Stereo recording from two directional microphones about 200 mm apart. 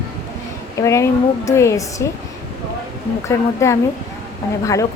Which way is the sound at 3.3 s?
15° left (ahead or behind).